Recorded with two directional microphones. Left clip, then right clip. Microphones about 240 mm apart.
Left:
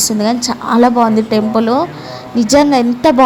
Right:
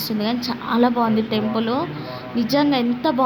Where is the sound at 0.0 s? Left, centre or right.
Left.